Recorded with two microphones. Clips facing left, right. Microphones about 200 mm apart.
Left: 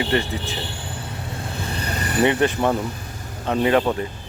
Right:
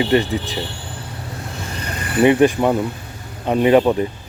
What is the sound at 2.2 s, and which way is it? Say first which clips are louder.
Speech: right 6 dB; 15° right (ahead or behind).